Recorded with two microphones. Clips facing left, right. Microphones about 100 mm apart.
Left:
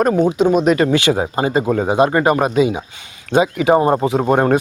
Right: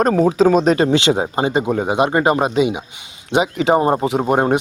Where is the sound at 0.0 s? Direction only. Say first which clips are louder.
Right 1 dB; 35° right (ahead or behind).